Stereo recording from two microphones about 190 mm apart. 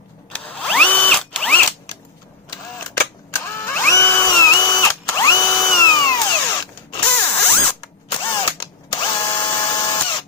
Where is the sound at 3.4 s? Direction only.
15° left (ahead or behind).